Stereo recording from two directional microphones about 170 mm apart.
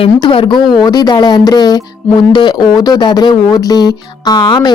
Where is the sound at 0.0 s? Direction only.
30° left (ahead or behind).